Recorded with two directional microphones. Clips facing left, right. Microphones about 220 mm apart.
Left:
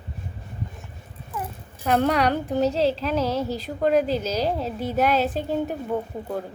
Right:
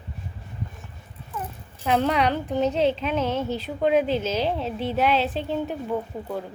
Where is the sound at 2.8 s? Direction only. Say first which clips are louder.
Even; 35° left (ahead or behind).